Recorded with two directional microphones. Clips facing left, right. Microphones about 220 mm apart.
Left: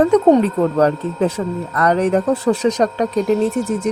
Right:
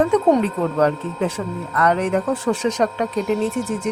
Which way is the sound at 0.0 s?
40° left (ahead or behind).